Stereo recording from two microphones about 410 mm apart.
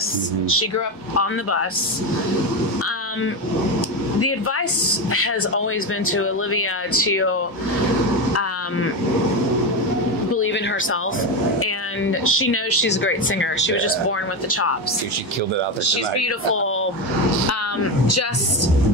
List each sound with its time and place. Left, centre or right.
0.5 s speech: left
4.2 s speech: left
10.3 s speech: left
16.2 s speech: left
18.0 s speech: left